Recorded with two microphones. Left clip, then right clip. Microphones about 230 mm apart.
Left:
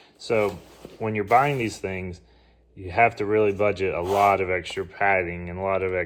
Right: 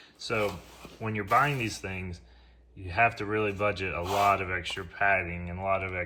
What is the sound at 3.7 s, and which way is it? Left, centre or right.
Speech, centre.